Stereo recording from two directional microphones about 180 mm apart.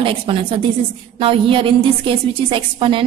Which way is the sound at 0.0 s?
30° right (ahead or behind).